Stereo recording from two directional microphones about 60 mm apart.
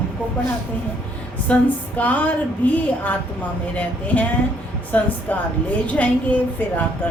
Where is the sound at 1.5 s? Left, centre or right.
Left.